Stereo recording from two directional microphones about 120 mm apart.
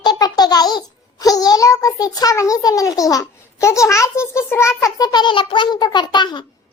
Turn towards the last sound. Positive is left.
turn(degrees=40)  # may be behind; listen again after turning